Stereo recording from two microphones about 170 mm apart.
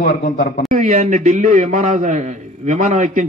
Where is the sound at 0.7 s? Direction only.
50° right (ahead or behind).